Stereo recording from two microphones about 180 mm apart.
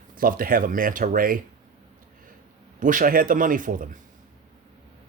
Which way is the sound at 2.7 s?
50° right (ahead or behind).